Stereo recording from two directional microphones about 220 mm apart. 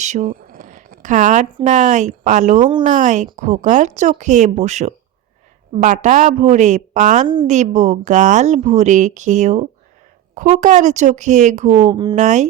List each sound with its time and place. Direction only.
0.0 s a sound: 35° right (ahead or behind)
1.5 s a woman's voice: 30° right (ahead or behind)
7.3 s speech: 20° right (ahead or behind)
7.5 s a woman's voice: 35° right (ahead or behind)
11.8 s speech: 20° right (ahead or behind)
12.1 s a woman's voice: 35° right (ahead or behind)